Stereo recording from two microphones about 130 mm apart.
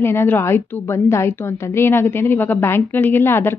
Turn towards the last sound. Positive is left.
turn(degrees=20)  # may be behind; listen again after turning